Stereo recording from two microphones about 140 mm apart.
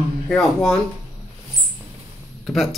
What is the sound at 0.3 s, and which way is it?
Speech, 5° left (ahead or behind).